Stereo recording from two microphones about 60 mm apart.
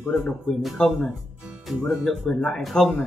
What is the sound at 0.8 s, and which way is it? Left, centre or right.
Speech, centre.